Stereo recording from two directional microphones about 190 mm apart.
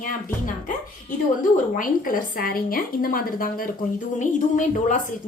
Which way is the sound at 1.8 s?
45° left (ahead or behind).